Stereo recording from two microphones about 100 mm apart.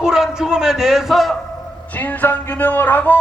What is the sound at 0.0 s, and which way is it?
Speech, 5° right (ahead or behind).